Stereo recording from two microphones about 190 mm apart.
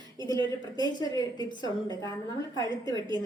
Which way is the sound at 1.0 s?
25° left (ahead or behind).